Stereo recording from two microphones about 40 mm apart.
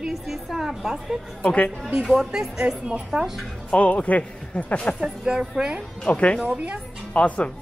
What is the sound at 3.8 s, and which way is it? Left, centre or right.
A man's voice, left.